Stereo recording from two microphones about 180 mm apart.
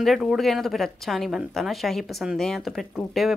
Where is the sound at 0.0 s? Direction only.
Centre (ahead or behind).